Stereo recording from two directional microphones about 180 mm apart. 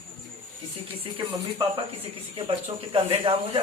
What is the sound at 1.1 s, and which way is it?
Speech, 30° right (ahead or behind).